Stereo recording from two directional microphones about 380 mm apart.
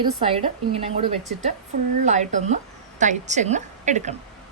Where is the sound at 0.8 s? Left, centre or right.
Centre.